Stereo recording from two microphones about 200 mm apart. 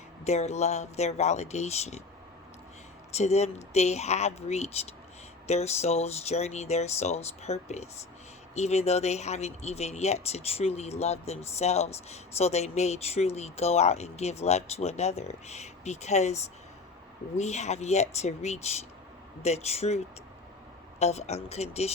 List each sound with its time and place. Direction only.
0.3 s speech: 35° left (ahead or behind)
3.2 s speech: 35° left (ahead or behind)
21.0 s speech: 35° left (ahead or behind)